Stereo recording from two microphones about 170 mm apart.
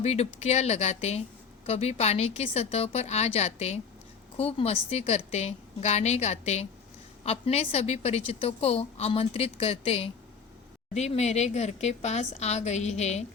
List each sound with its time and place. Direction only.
0.0 s a woman's voice: 40° left (ahead or behind)